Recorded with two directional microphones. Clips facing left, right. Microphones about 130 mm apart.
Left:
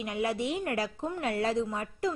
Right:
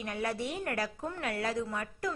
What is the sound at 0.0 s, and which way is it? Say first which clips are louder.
A woman's voice: left 4 dB; 20° left (ahead or behind).